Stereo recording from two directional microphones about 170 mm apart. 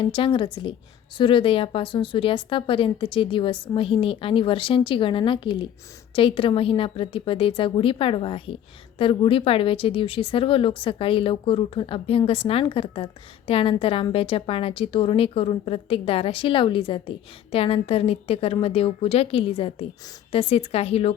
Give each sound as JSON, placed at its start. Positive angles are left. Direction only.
{"t": 0.0, "sound": "a woman's voice", "side_deg": 30}